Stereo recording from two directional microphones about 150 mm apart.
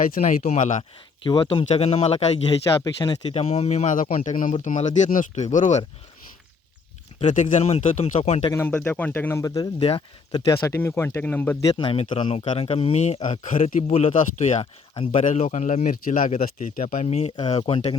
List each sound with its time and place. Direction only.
0.2 s speech: 60° left (ahead or behind)
0.8 s speech: 35° left (ahead or behind)
2.8 s speech: 30° left (ahead or behind)
3.3 s speech: 45° left (ahead or behind)
7.2 s speech: 55° left (ahead or behind)
8.5 s speech: 15° left (ahead or behind)
9.7 s speech: 40° left (ahead or behind)
10.3 s speech: 20° left (ahead or behind)
11.6 s speech: 30° left (ahead or behind); by 14.7 s 50° left (ahead or behind)
14.9 s speech: 40° left (ahead or behind)
15.2 s speech: 55° left (ahead or behind)
16.9 s speech: 50° left (ahead or behind)